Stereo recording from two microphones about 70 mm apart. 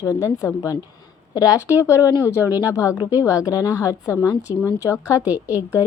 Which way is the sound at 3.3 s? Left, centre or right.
Left.